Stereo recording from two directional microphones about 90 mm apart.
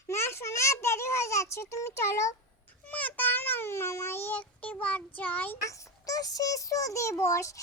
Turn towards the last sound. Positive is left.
turn(degrees=35)  # may be behind; listen again after turning